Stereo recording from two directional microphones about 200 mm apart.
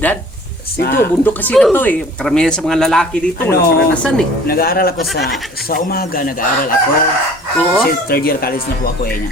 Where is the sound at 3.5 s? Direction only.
50° left (ahead or behind).